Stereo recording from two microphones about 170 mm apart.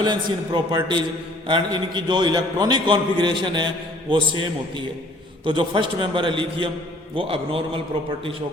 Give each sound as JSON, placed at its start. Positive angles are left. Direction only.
{"t": 0.0, "sound": "a man's voice", "side_deg": -25}
{"t": 5.5, "sound": "a man's voice", "side_deg": -30}